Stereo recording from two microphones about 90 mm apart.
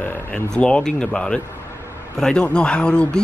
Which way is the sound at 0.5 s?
10° left (ahead or behind).